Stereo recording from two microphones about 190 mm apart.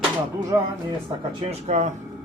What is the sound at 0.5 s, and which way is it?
Speech, 15° right (ahead or behind).